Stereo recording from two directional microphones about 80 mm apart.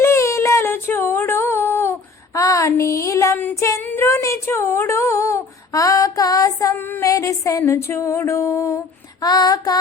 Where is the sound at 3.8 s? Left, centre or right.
Left.